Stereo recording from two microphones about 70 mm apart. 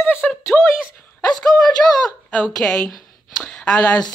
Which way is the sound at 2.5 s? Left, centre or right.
Centre.